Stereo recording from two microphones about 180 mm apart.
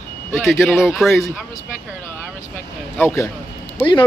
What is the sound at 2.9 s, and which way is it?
Speech, 10° left (ahead or behind).